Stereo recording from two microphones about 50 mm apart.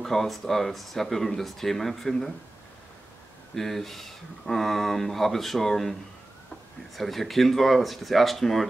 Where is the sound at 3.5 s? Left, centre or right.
Centre.